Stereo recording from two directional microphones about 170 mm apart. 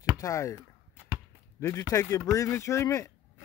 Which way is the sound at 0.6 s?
15° right (ahead or behind).